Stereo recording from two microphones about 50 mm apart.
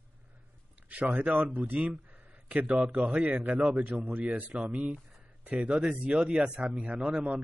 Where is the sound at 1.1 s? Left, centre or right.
Right.